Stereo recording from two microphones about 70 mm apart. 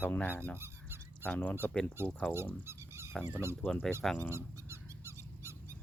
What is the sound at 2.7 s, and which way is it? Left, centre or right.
Dog, right.